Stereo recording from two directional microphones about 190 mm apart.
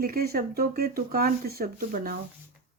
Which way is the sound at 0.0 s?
50° right (ahead or behind).